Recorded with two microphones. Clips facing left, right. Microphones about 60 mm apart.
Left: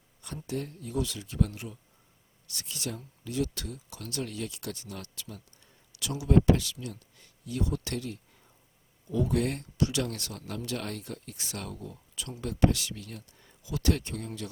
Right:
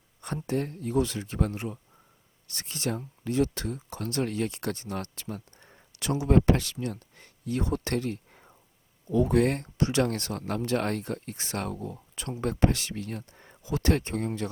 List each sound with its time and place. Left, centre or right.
0.4 s speech: right